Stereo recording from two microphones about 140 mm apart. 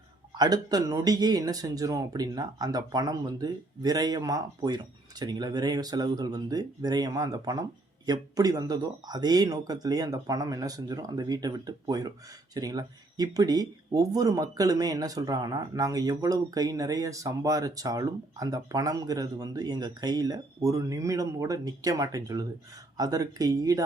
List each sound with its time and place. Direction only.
0.3 s speech: 30° right (ahead or behind)